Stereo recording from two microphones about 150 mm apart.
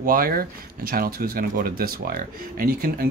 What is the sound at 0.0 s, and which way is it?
Speech, 70° right (ahead or behind).